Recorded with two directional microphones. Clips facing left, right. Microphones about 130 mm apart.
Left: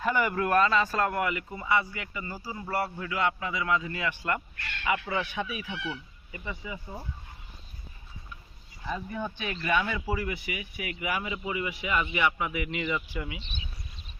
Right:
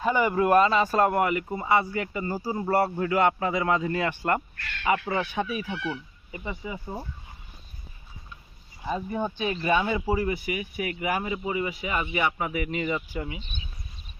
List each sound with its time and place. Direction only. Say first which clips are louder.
0.0 s a man's voice: right 4 dB; 20° right (ahead or behind); by 4.4 s 45° right (ahead or behind)
4.8 s a man's voice: right 4 dB; 35° right (ahead or behind)
6.3 s speech: right 4 dB; 25° right (ahead or behind)
8.9 s a man's voice: right 5 dB; 25° right (ahead or behind)